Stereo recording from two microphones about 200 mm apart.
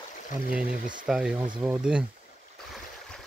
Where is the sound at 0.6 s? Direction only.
45° right (ahead or behind).